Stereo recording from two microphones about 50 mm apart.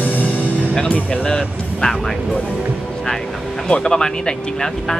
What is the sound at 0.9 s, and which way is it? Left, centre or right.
Speech, left.